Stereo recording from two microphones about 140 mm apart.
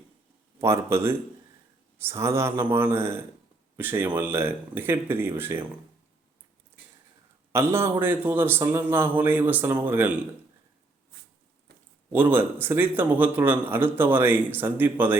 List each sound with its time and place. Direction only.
0.6 s a man's voice: 20° right (ahead or behind)
7.5 s a man's voice: 15° right (ahead or behind)
12.1 s a man's voice: 15° right (ahead or behind)